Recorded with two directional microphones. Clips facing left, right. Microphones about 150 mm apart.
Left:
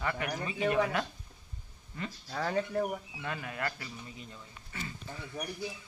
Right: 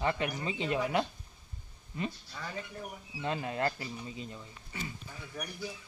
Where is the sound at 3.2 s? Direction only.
25° right (ahead or behind).